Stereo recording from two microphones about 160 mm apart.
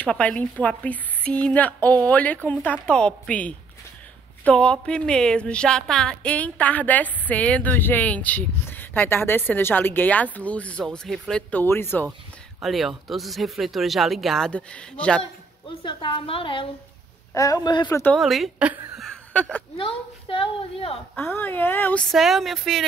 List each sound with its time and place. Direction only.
0.0 s speech: 10° left (ahead or behind)
12.6 s speech: centre (ahead or behind)
15.8 s a woman's voice: 30° left (ahead or behind)
17.3 s a man's voice: 20° left (ahead or behind)
17.8 s speech: 10° left (ahead or behind)
18.2 s a woman's voice: centre (ahead or behind)
19.8 s a woman's voice: 35° left (ahead or behind)
21.2 s speech: 15° left (ahead or behind)